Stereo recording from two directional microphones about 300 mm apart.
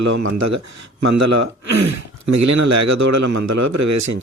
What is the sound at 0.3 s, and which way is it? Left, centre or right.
Speech, right.